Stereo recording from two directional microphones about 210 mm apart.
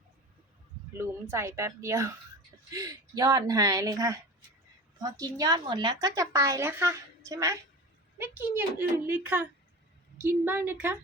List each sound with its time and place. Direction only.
0.9 s a woman's voice: 15° right (ahead or behind)